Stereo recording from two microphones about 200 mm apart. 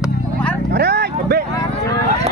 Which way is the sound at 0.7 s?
55° right (ahead or behind).